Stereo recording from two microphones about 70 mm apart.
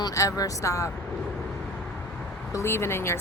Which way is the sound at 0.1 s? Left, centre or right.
Left.